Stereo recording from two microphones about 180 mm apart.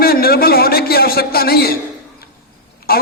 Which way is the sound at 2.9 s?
55° left (ahead or behind).